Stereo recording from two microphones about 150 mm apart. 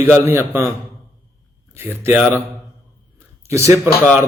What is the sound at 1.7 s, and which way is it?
Speech, 15° right (ahead or behind).